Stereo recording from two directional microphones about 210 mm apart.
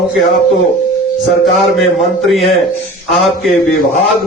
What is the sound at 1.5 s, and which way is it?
A man's voice, centre (ahead or behind).